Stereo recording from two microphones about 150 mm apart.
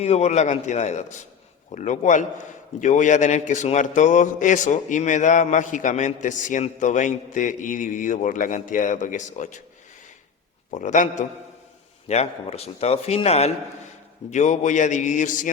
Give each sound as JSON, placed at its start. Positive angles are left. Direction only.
{"t": 0.0, "sound": "a man's voice", "side_deg": 45}
{"t": 10.7, "sound": "a man's voice", "side_deg": 55}
{"t": 12.0, "sound": "a man's voice", "side_deg": 45}